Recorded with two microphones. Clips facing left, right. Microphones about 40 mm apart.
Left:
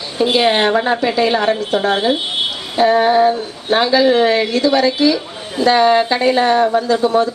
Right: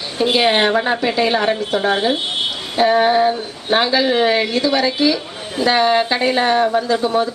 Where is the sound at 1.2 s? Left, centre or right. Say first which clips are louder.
Left 2 dB; centre.